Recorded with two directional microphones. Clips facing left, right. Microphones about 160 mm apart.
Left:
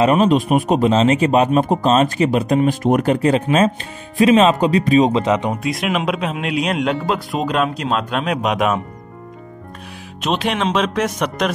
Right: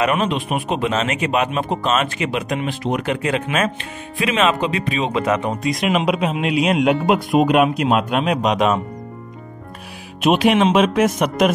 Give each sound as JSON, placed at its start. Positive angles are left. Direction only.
{"t": 0.0, "sound": "speech", "side_deg": 35}
{"t": 5.2, "sound": "speech", "side_deg": 20}
{"t": 5.5, "sound": "speech", "side_deg": 5}
{"t": 7.1, "sound": "speech", "side_deg": -20}
{"t": 8.4, "sound": "speech", "side_deg": 5}
{"t": 10.2, "sound": "speech", "side_deg": -10}